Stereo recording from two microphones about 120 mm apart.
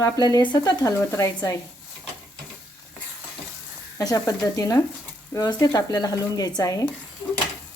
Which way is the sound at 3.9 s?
30° left (ahead or behind).